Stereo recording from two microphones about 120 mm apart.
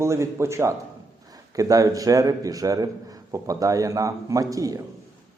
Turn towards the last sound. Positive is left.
turn(degrees=-30)  # may be behind; listen again after turning